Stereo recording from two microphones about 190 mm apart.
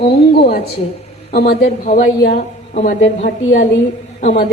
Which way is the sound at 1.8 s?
40° left (ahead or behind).